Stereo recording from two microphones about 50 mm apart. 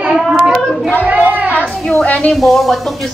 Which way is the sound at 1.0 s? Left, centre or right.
Right.